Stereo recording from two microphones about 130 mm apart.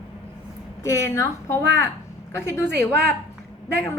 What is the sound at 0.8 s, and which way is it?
A woman's voice, 20° left (ahead or behind).